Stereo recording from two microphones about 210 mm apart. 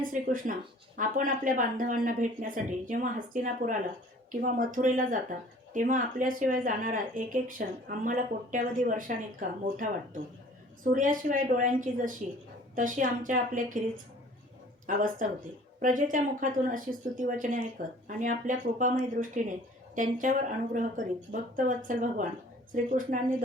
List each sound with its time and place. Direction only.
0.0 s speech: 40° right (ahead or behind)
10.9 s speech: 40° right (ahead or behind)